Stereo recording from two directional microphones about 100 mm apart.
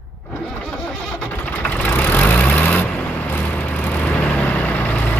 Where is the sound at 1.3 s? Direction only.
20° left (ahead or behind).